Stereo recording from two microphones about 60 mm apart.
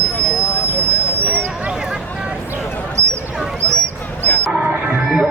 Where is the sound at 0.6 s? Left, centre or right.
Right.